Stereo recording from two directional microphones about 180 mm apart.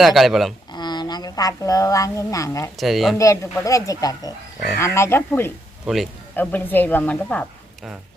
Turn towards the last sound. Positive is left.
turn(degrees=5)  # may be behind; listen again after turning